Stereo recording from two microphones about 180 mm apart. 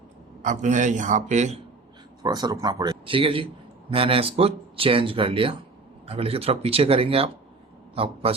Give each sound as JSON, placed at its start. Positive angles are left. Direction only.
{"t": 0.4, "sound": "speech", "side_deg": -40}
{"t": 2.2, "sound": "speech", "side_deg": -20}